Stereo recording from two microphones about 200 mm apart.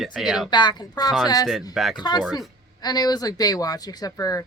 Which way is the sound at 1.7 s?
Centre (ahead or behind).